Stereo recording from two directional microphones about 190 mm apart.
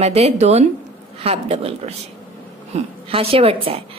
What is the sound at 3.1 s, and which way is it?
Speech, 30° right (ahead or behind).